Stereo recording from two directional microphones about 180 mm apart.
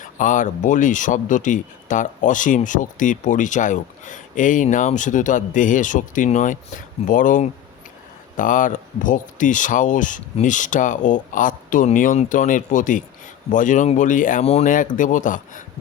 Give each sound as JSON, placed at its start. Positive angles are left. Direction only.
{"t": 0.0, "sound": "speech", "side_deg": 45}